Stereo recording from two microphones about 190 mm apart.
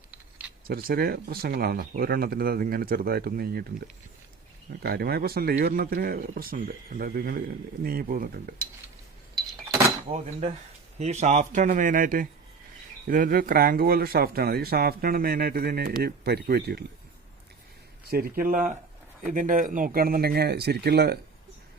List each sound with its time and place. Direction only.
0.9 s speech: 55° right (ahead or behind)
11.0 s speech: 35° right (ahead or behind); by 16.8 s 55° right (ahead or behind)
18.1 s speech: 50° right (ahead or behind)